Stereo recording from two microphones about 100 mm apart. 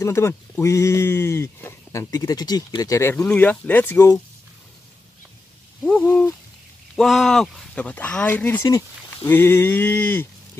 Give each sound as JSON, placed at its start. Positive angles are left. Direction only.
{"t": 0.0, "sound": "speech", "side_deg": 30}
{"t": 3.0, "sound": "speech", "side_deg": 25}
{"t": 3.3, "sound": "speech", "side_deg": 15}
{"t": 5.9, "sound": "speech", "side_deg": 5}
{"t": 7.7, "sound": "speech", "side_deg": 15}